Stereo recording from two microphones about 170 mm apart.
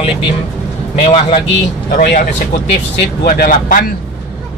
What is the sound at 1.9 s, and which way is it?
Speech, 55° left (ahead or behind).